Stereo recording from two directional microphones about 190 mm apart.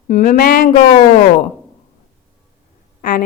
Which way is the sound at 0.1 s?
45° left (ahead or behind).